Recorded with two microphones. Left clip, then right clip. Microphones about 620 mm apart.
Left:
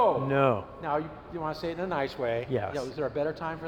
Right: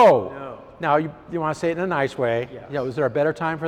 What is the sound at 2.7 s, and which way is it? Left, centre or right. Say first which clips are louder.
Speech: right 9 dB; right.